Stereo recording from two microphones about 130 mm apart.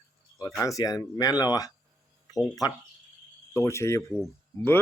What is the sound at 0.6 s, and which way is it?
Speech, 25° left (ahead or behind).